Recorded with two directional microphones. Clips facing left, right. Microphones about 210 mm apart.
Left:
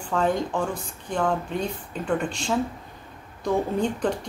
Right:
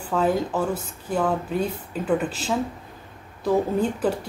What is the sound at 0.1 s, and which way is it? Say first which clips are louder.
A woman's voice: right 2 dB; 5° right (ahead or behind).